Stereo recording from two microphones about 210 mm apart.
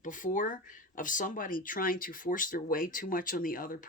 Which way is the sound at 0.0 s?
40° left (ahead or behind).